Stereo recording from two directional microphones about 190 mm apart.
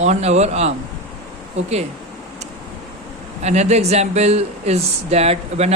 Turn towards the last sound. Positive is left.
turn(degrees=-35)  # may be behind; listen again after turning